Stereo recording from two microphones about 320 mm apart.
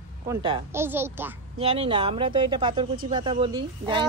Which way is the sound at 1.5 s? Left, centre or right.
Centre.